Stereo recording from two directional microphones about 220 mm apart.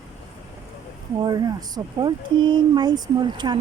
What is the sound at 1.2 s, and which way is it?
Speech, 20° right (ahead or behind).